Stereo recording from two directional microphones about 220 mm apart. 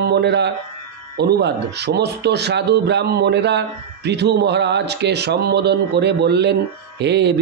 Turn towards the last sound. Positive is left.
turn(degrees=-50)  # may be behind; listen again after turning